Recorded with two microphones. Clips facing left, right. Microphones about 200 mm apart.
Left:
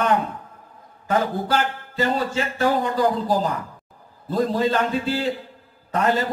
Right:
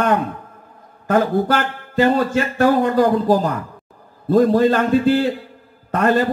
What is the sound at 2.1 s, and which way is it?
A man's voice, 55° right (ahead or behind).